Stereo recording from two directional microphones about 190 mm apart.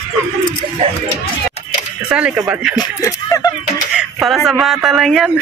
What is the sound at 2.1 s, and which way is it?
Speech, 10° right (ahead or behind).